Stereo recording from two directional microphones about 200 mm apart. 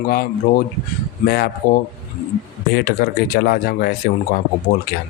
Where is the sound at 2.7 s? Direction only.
50° left (ahead or behind).